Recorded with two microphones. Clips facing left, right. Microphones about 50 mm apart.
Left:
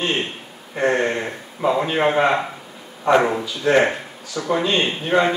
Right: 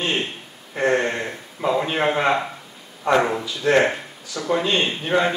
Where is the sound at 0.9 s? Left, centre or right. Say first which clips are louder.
Left 1 dB; centre.